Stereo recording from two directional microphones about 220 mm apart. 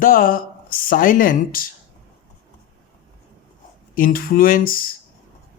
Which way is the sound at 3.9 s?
40° left (ahead or behind).